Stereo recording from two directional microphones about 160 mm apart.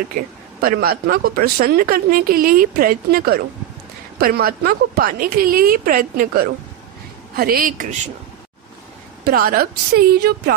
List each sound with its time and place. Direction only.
0.6 s a woman's voice: 70° right (ahead or behind)
9.2 s a woman's voice: 65° right (ahead or behind)